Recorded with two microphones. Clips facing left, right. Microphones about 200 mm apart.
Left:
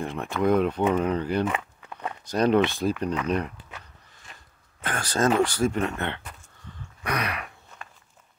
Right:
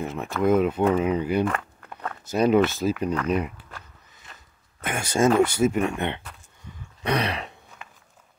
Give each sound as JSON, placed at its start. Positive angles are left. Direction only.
{"t": 0.0, "sound": "speech", "side_deg": -5}
{"t": 1.5, "sound": "walk", "side_deg": 5}
{"t": 2.2, "sound": "speech", "side_deg": -5}
{"t": 5.1, "sound": "speech", "side_deg": -10}
{"t": 7.0, "sound": "throat clearing", "side_deg": -25}